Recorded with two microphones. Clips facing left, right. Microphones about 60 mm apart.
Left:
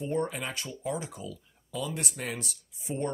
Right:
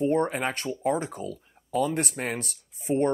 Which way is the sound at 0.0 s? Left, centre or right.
Right.